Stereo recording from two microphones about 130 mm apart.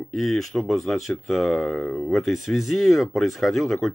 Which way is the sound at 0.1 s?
Centre (ahead or behind).